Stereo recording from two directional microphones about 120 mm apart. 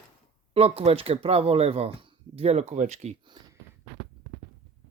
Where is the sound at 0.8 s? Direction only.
55° right (ahead or behind).